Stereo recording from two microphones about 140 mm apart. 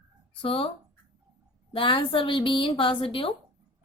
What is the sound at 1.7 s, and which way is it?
A woman's voice, 40° left (ahead or behind).